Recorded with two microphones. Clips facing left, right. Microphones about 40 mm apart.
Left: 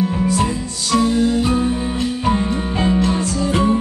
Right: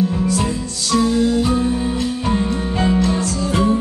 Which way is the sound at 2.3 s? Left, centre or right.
Centre.